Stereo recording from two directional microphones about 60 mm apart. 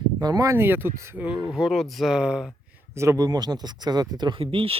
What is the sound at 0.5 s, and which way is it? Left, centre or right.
Speech, right.